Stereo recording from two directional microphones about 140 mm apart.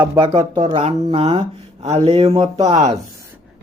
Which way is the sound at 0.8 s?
55° right (ahead or behind).